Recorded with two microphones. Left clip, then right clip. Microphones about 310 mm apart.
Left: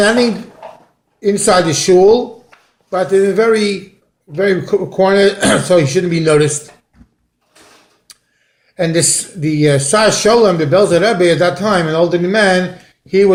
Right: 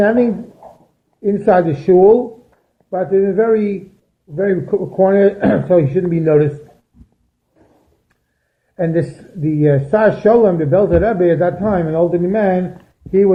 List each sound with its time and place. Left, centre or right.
1.2 s speech: centre
8.7 s speech: centre